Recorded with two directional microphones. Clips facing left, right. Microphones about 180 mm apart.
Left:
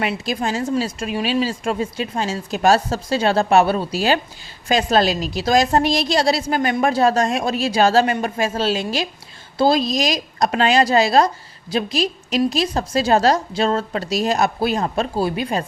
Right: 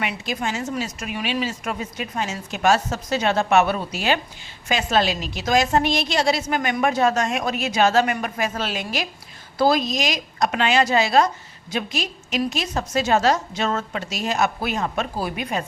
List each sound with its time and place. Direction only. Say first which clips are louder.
0.0 s a woman's voice: left 4 dB; 35° left (ahead or behind)